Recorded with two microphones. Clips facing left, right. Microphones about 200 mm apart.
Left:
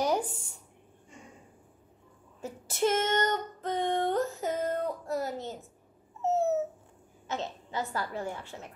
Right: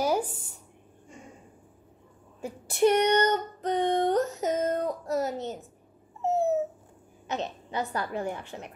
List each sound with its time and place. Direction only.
2.4 s female singing: 15° right (ahead or behind)
5.1 s a child's voice: 20° right (ahead or behind)
6.2 s dog: 15° right (ahead or behind)
7.2 s a woman's voice: 20° right (ahead or behind)